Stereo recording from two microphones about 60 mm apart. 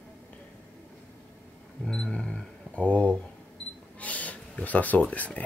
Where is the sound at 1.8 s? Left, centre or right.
Centre; by 5.0 s left.